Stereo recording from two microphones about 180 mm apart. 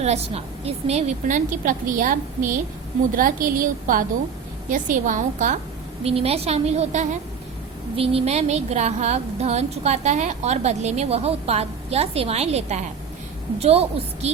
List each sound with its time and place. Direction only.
0.0 s a woman's voice: 35° right (ahead or behind)
6.1 s speech: 35° right (ahead or behind)